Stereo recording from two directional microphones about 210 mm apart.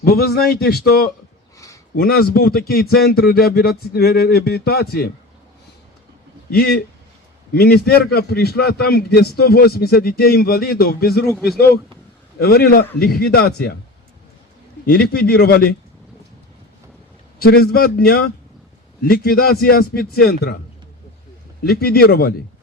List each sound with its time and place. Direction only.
0.0 s a man's voice: 45° left (ahead or behind)
1.5 s a sound: 15° left (ahead or behind)
2.0 s a man's voice: 45° left (ahead or behind)
6.5 s a man's voice: 45° left (ahead or behind)
11.3 s a man's voice: 5° left (ahead or behind)
12.4 s a man's voice: 45° left (ahead or behind)
14.8 s a man's voice: 45° left (ahead or behind)
17.4 s a man's voice: 45° left (ahead or behind)
21.6 s a man's voice: 45° left (ahead or behind)